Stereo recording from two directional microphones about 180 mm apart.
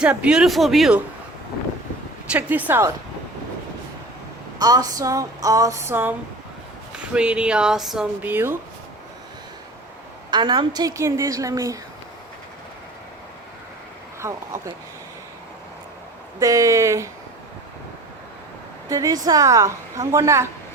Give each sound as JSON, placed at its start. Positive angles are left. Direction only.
{"t": 0.0, "sound": "speech", "side_deg": -5}
{"t": 2.3, "sound": "a woman's voice", "side_deg": -10}
{"t": 4.5, "sound": "a sound", "side_deg": -20}
{"t": 7.1, "sound": "speech", "side_deg": -5}
{"t": 10.3, "sound": "a sound", "side_deg": -25}
{"t": 14.2, "sound": "speech", "side_deg": -15}
{"t": 16.4, "sound": "a woman's voice", "side_deg": -20}
{"t": 18.9, "sound": "a woman's voice", "side_deg": -20}